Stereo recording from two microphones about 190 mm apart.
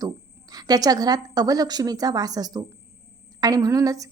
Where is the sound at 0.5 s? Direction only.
20° right (ahead or behind).